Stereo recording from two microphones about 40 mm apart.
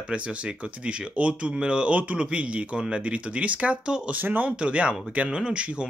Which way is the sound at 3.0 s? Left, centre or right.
Right.